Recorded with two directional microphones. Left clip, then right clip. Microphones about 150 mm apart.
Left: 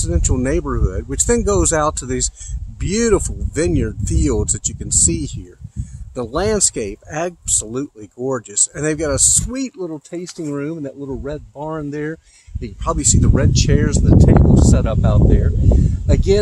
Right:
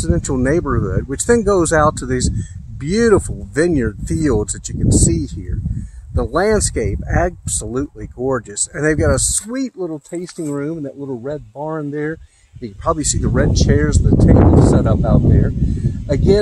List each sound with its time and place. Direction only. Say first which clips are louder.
0.0 s speech: right 3 dB; 55° right (ahead or behind)
10.2 s speech: right 2 dB; 20° right (ahead or behind)
10.5 s speech: right 1 dB; 45° right (ahead or behind)
12.6 s speech: right 1 dB; 55° right (ahead or behind)